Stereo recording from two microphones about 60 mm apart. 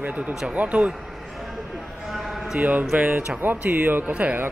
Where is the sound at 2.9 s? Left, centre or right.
Right.